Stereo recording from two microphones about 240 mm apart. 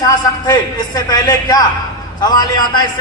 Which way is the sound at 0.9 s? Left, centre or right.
Centre.